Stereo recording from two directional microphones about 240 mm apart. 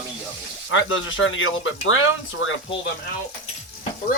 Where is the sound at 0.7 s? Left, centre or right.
Left.